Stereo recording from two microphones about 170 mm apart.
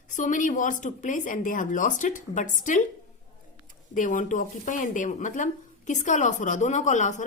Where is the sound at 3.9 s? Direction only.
50° left (ahead or behind).